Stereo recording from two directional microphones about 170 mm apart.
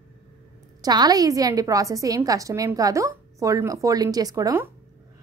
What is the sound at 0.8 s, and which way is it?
A woman's voice, 25° right (ahead or behind).